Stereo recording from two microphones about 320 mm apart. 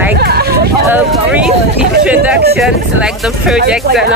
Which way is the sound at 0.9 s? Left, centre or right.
Centre.